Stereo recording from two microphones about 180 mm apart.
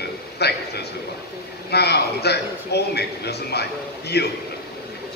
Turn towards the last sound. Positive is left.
turn(degrees=65)  # may be behind; listen again after turning